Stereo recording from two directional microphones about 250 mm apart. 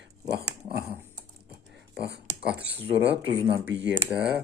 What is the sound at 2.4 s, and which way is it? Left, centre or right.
Speech, centre.